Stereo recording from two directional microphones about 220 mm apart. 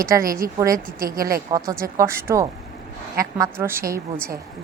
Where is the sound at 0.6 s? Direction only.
15° right (ahead or behind).